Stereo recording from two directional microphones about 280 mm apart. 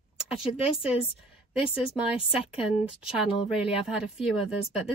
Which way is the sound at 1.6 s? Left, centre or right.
Centre.